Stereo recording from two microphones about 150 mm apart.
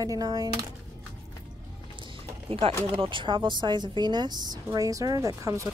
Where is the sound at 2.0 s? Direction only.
35° right (ahead or behind).